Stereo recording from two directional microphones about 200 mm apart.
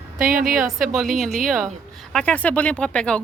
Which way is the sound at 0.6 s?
Centre (ahead or behind).